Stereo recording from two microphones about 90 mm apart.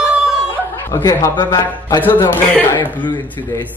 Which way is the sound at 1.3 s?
50° left (ahead or behind).